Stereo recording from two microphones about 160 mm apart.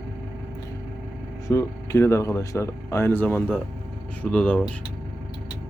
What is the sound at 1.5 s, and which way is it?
Speech, 20° left (ahead or behind).